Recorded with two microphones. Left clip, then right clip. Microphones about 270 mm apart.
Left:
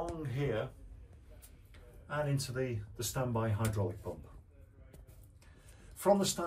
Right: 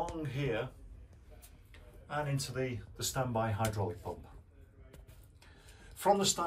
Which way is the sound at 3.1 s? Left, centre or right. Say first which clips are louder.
Right 2 dB; centre.